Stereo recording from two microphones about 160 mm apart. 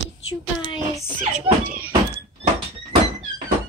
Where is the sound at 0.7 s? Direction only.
30° left (ahead or behind).